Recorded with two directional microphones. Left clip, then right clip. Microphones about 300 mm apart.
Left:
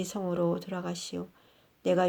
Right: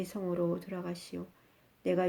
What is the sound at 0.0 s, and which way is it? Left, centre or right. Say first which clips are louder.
Speech: left 4 dB; centre.